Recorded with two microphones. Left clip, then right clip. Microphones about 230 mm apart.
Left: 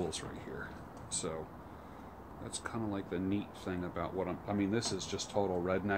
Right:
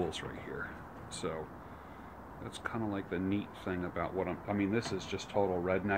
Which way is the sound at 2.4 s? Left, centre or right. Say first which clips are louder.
Right 2 dB; centre.